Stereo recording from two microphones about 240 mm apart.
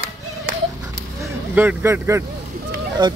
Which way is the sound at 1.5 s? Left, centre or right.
Centre.